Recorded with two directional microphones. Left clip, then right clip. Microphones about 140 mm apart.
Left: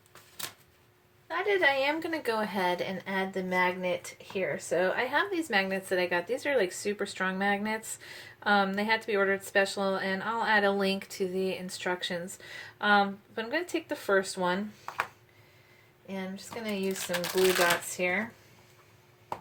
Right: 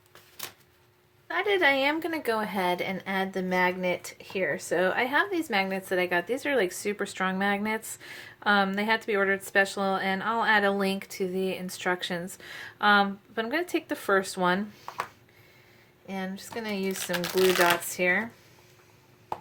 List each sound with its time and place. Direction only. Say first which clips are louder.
1.3 s a woman's voice: right 2 dB; 45° right (ahead or behind)
16.0 s speech: right 3 dB; 55° right (ahead or behind)
17.1 s a woman's voice: right 2 dB; 40° right (ahead or behind)
17.9 s speech: right 5 dB; 65° right (ahead or behind)